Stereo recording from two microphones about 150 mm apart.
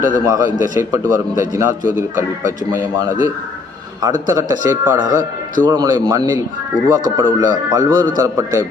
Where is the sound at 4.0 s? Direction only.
25° right (ahead or behind).